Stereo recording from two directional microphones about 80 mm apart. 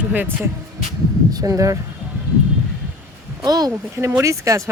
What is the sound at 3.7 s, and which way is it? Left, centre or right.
Speech, right.